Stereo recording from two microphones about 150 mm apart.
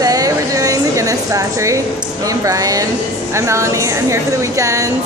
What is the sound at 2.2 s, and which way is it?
A woman's voice, 20° right (ahead or behind).